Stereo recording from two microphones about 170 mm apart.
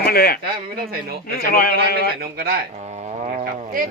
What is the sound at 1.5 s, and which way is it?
Speech, 60° left (ahead or behind).